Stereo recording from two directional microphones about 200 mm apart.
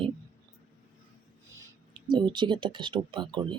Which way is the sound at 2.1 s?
25° right (ahead or behind).